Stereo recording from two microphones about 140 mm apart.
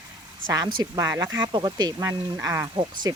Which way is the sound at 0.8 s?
25° right (ahead or behind).